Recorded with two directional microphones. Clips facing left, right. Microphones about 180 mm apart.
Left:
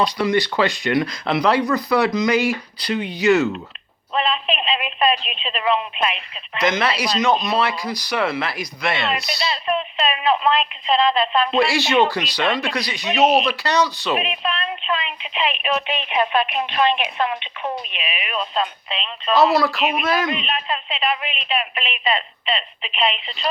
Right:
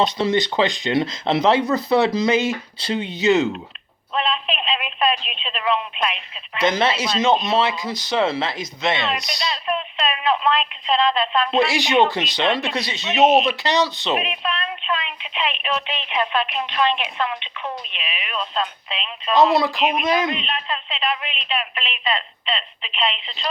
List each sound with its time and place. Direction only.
0.0 s speech: 25° right (ahead or behind)
4.1 s speech: centre (ahead or behind)
6.6 s speech: 30° right (ahead or behind)
9.0 s speech: centre (ahead or behind)
11.6 s speech: 15° right (ahead or behind)
14.2 s speech: centre (ahead or behind)
16.6 s a woman's voice: 50° left (ahead or behind)
16.8 s speech: 15° left (ahead or behind)
17.2 s a woman's voice: 50° left (ahead or behind)
17.9 s speech: 10° left (ahead or behind)